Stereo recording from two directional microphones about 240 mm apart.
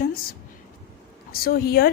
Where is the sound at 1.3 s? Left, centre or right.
Left.